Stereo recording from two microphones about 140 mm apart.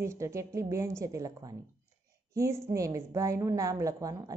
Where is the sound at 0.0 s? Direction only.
20° right (ahead or behind).